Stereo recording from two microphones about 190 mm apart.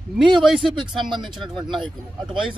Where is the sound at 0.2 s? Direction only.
25° right (ahead or behind).